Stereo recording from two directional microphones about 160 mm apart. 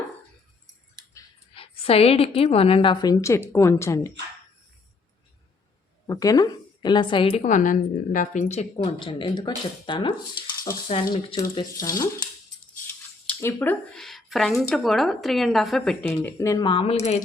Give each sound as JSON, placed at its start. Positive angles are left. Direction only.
{"t": 1.5, "sound": "a woman's voice", "side_deg": 35}
{"t": 6.1, "sound": "a woman's voice", "side_deg": 20}
{"t": 7.4, "sound": "a woman's voice", "side_deg": 55}
{"t": 11.4, "sound": "speech", "side_deg": 20}
{"t": 12.9, "sound": "speech", "side_deg": 15}
{"t": 16.6, "sound": "a woman's voice", "side_deg": 35}